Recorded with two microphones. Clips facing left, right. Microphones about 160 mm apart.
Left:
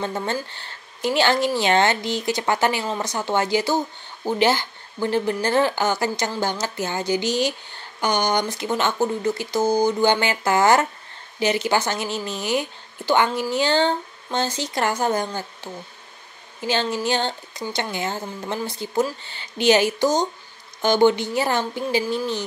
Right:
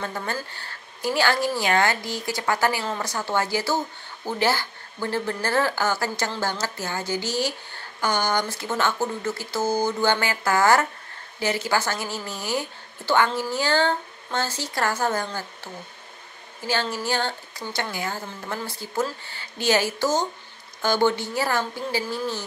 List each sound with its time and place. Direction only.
0.0 s speech: 20° left (ahead or behind)